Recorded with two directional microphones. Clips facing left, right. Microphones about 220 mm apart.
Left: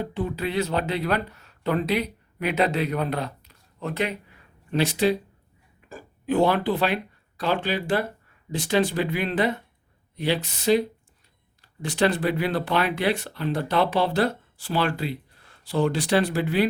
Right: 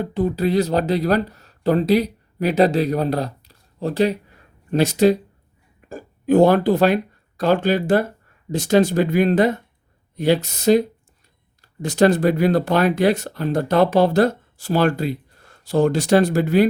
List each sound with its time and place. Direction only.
0.0 s speech: 40° right (ahead or behind)